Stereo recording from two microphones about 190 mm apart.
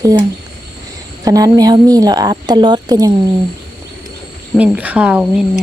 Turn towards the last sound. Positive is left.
turn(degrees=-5)  # may be behind; listen again after turning